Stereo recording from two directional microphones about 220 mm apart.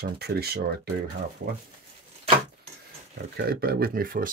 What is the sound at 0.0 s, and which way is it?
Speech, 45° right (ahead or behind).